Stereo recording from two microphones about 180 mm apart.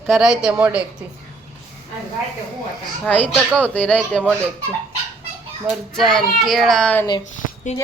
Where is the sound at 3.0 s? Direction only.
10° left (ahead or behind).